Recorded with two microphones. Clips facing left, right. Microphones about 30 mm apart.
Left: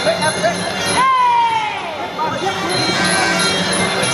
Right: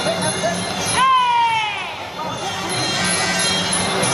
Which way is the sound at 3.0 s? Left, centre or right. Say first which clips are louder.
Left 4 dB; centre.